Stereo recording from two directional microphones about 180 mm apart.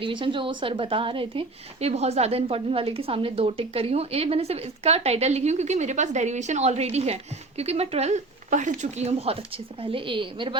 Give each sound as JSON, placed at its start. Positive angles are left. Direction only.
{"t": 0.0, "sound": "a woman's voice", "side_deg": -25}